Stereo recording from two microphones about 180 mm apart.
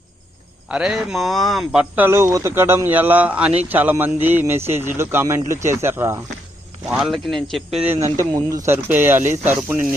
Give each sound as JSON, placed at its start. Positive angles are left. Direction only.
{"t": 0.7, "sound": "speech", "side_deg": -5}
{"t": 6.8, "sound": "speech", "side_deg": -5}
{"t": 8.2, "sound": "speech", "side_deg": -15}
{"t": 9.2, "sound": "speech", "side_deg": -45}
{"t": 9.5, "sound": "speech", "side_deg": -10}